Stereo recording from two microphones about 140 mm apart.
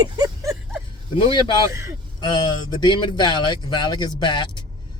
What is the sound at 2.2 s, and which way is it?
Speech, 30° left (ahead or behind).